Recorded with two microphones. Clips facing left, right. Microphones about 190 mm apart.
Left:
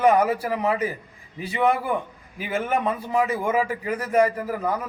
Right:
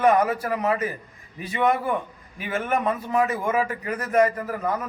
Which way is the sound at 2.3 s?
25° left (ahead or behind).